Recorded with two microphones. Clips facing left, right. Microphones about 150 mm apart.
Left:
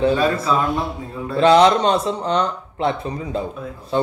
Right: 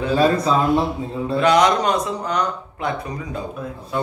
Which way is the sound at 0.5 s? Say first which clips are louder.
Right 1 dB; 30° right (ahead or behind).